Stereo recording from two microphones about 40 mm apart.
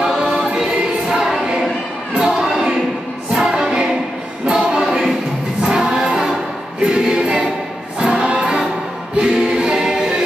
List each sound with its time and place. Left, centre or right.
0.3 s choir: right
0.6 s choir: centre
2.2 s a sound: centre
3.3 s music: centre
6.8 s choir: right
8.0 s music: right
9.1 s choir: right